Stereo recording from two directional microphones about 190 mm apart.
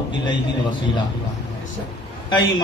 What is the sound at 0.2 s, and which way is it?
Speech, 25° left (ahead or behind).